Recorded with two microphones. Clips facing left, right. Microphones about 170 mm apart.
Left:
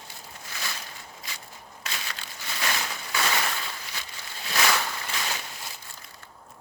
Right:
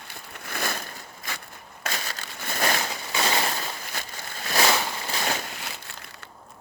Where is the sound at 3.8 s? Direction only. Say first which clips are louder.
Right 4 dB; 50° right (ahead or behind).